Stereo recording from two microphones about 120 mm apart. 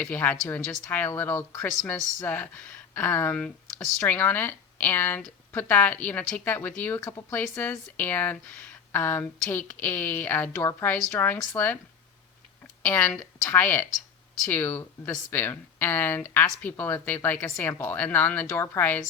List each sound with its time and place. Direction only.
0.0 s speech: 15° left (ahead or behind)
12.8 s speech: 20° left (ahead or behind)